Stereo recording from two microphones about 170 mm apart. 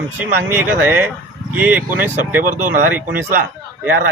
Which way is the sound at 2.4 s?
50° right (ahead or behind).